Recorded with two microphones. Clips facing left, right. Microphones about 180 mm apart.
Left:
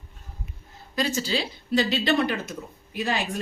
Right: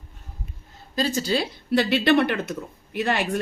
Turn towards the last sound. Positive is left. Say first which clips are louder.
# right 4 dB
turn(degrees=-65)  # may be behind; listen again after turning